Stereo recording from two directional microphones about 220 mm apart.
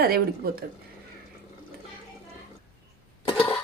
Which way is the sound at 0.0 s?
45° right (ahead or behind).